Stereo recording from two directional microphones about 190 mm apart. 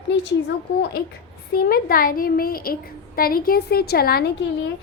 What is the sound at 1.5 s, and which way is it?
A woman's voice, 50° left (ahead or behind).